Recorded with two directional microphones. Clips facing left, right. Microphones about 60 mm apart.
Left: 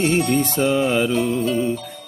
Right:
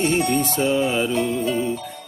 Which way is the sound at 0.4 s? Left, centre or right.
Left.